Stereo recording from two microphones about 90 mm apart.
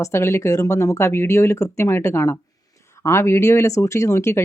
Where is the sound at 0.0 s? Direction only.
30° left (ahead or behind).